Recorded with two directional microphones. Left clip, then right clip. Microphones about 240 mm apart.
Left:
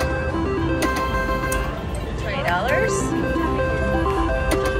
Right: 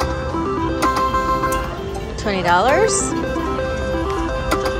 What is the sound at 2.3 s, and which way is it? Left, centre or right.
Music, right.